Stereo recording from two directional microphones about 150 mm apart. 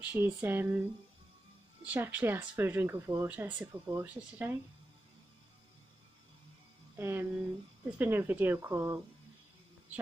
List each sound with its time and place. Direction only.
0.0 s speech: 10° right (ahead or behind)
1.9 s speech: 10° right (ahead or behind)
7.0 s speech: 15° right (ahead or behind)